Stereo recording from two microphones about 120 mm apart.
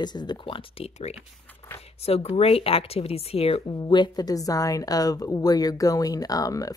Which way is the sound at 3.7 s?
40° left (ahead or behind).